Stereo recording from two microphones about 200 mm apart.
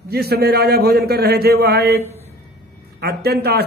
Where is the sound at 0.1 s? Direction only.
50° right (ahead or behind).